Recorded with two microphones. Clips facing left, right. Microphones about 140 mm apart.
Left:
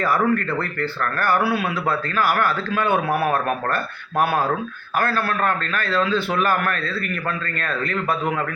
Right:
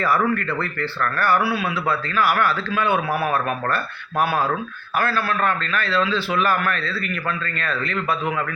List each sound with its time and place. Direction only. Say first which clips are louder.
0.0 s speech: left 1 dB; 45° left (ahead or behind)
4.9 s speech: even; 45° left (ahead or behind)